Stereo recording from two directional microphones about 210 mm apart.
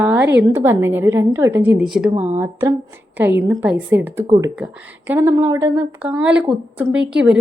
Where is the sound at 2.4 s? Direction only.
15° right (ahead or behind).